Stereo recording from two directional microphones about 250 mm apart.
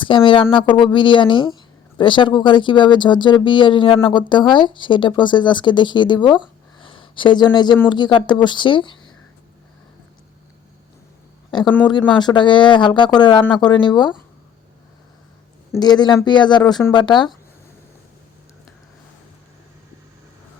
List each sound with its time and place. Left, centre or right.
0.0 s speech: centre
11.9 s speech: centre
15.8 s speech: centre